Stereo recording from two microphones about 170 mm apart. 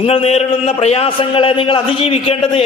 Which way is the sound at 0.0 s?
35° left (ahead or behind).